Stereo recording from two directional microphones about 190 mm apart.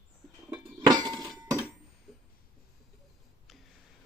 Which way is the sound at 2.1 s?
Centre (ahead or behind).